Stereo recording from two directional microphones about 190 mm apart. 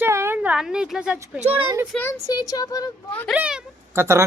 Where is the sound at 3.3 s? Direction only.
5° right (ahead or behind).